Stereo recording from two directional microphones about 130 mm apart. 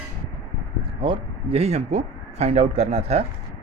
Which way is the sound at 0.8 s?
40° right (ahead or behind).